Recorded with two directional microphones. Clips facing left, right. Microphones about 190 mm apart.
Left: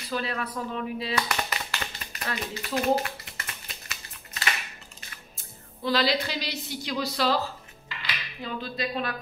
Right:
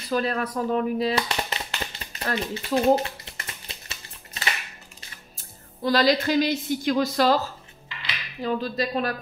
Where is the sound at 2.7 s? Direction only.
30° right (ahead or behind).